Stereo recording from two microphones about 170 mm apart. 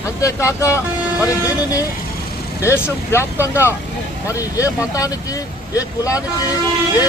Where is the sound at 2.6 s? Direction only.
15° left (ahead or behind).